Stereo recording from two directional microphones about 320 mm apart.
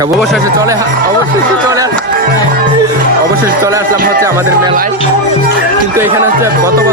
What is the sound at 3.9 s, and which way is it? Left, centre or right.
Speech, right.